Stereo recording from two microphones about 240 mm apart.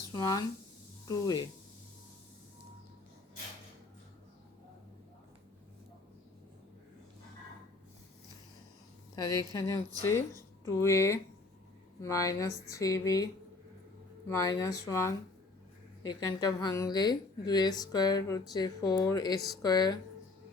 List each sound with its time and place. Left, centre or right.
0.1 s speech: centre
9.5 s speech: centre
14.3 s speech: centre